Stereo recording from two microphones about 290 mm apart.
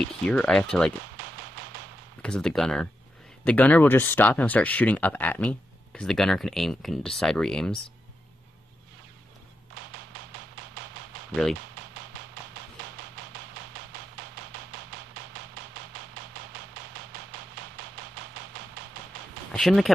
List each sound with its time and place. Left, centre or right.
0.3 s speech: centre
2.2 s speech: centre
19.5 s speech: centre